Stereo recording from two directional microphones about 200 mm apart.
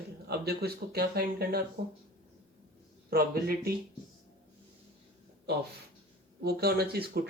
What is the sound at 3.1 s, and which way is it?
Speech, 50° right (ahead or behind).